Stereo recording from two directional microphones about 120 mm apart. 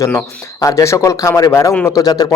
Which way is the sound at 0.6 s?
30° left (ahead or behind).